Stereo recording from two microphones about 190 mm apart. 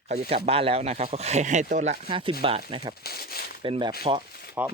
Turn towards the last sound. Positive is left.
turn(degrees=-10)  # may be behind; listen again after turning